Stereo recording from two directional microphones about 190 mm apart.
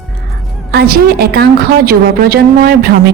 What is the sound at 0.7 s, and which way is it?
A woman's voice, 55° right (ahead or behind).